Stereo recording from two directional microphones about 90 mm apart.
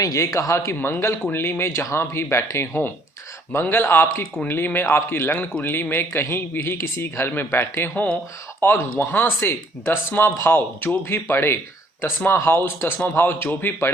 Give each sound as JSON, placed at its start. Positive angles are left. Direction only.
{"t": 0.0, "sound": "speech", "side_deg": 40}